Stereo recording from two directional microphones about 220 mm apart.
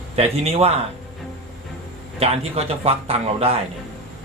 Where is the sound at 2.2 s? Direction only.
30° right (ahead or behind).